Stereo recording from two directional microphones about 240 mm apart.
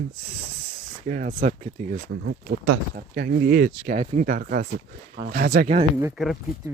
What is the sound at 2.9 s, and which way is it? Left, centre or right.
Speech, right.